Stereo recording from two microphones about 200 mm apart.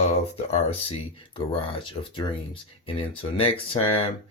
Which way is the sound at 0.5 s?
30° left (ahead or behind).